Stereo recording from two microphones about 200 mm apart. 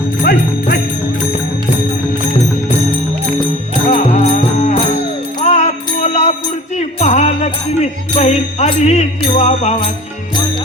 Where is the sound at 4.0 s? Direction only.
40° left (ahead or behind).